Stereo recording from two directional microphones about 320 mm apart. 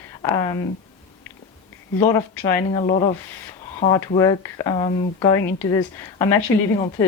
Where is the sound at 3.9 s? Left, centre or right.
Centre.